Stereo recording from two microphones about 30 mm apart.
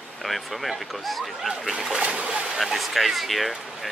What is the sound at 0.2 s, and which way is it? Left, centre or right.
Speech, centre.